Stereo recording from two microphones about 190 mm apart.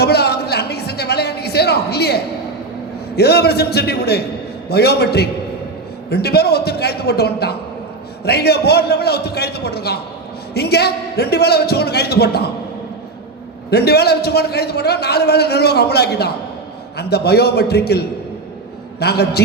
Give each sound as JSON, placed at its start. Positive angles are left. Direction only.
{"t": 0.0, "sound": "music", "side_deg": 60}
{"t": 3.2, "sound": "a man's voice", "side_deg": 60}
{"t": 13.7, "sound": "a man's voice", "side_deg": 60}